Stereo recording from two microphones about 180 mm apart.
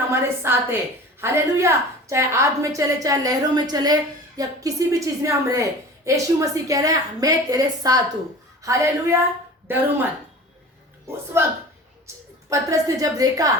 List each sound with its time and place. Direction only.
0.1 s a sound: 15° right (ahead or behind)
1.2 s a woman's voice: 15° right (ahead or behind)
11.3 s a woman's voice: 15° right (ahead or behind)